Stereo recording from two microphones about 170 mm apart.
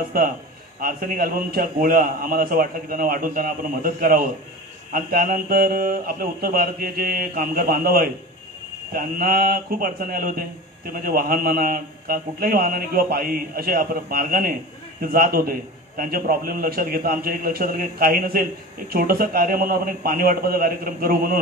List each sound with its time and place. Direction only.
0.1 s a man's voice: 60° right (ahead or behind)